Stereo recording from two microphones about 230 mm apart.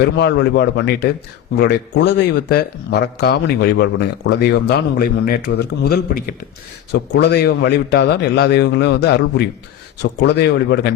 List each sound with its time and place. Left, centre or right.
0.0 s speech: left